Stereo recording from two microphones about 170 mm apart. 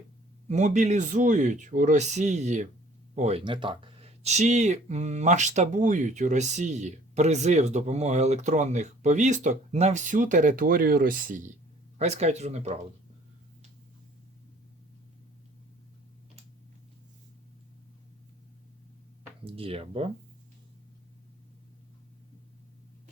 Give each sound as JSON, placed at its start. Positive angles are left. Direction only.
{"t": 0.4, "sound": "speech", "side_deg": -45}
{"t": 11.9, "sound": "speech", "side_deg": -40}
{"t": 19.5, "sound": "speech", "side_deg": -35}